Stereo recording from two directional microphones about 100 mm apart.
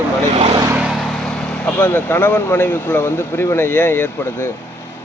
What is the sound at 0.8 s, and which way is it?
Speech, centre (ahead or behind).